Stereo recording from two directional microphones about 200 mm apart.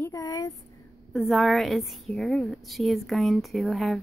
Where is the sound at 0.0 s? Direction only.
15° left (ahead or behind).